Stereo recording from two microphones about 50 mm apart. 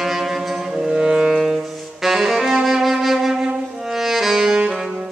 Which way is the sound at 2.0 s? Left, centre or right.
Centre.